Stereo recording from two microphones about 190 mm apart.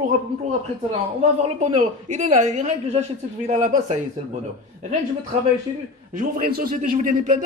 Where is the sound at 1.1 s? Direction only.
35° right (ahead or behind).